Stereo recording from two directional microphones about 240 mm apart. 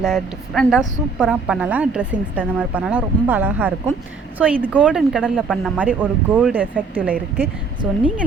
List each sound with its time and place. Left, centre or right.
0.0 s a woman's voice: centre